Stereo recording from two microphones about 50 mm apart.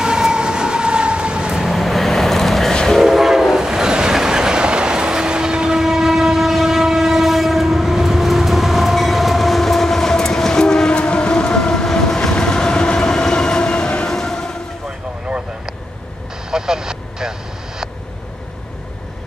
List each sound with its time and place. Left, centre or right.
0.0 s vehicle: centre
1.6 s vehicle: centre
2.9 s train: centre
16.4 s vehicle: centre